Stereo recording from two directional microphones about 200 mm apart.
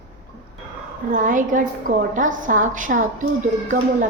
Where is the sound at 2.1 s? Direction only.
40° right (ahead or behind).